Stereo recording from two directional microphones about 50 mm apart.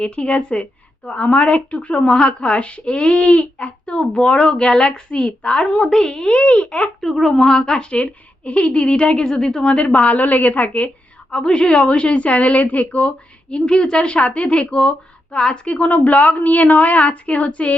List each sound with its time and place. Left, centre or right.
0.0 s a woman's voice: left
7.0 s a woman's voice: centre; by 17.7 s left